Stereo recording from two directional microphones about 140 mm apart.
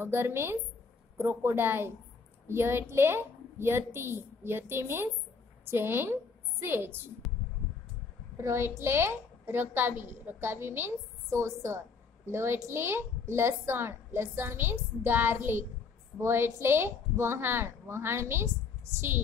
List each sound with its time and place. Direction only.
0.0 s a woman's voice: 15° right (ahead or behind)
8.4 s a woman's voice: 20° right (ahead or behind)